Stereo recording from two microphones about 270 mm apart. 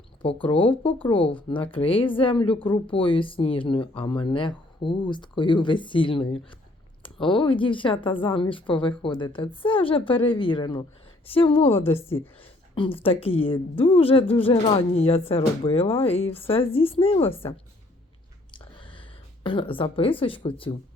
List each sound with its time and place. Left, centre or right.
0.4 s speech: centre
11.7 s a woman's voice: centre
12.7 s speech: centre
18.5 s a sound: centre